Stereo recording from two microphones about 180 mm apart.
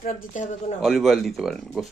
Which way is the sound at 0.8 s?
Centre (ahead or behind).